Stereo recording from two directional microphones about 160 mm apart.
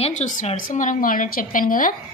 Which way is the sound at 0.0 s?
50° left (ahead or behind).